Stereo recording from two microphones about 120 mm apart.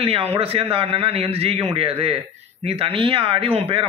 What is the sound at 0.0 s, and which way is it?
A man's voice, 55° right (ahead or behind).